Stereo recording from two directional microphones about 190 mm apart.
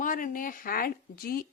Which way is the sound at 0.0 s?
45° left (ahead or behind).